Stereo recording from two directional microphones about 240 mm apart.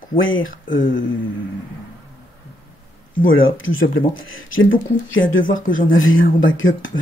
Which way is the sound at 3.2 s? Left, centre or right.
Left.